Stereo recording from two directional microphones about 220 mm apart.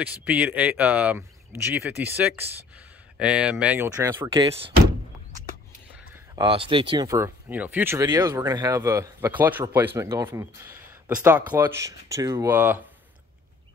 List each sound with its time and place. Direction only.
0.0 s speech: 5° right (ahead or behind)
4.3 s speech: 25° right (ahead or behind)
6.1 s speech: 20° right (ahead or behind)